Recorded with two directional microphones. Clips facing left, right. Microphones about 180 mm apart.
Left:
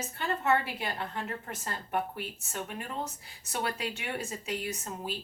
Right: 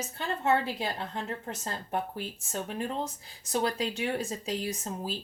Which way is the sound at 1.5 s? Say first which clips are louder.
Right 2 dB; 30° right (ahead or behind).